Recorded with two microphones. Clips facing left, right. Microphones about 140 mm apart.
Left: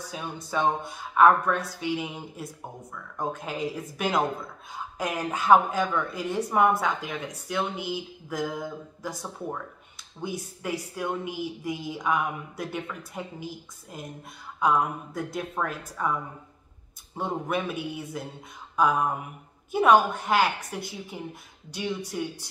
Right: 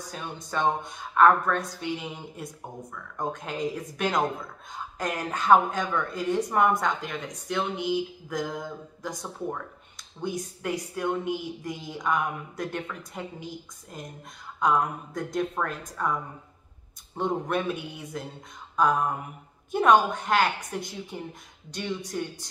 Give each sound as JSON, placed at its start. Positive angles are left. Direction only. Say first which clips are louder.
{"t": 0.1, "sound": "a woman's voice", "louder": "left 2 dB", "side_deg": 10}